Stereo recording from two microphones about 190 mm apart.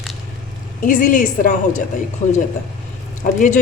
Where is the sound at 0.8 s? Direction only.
45° left (ahead or behind).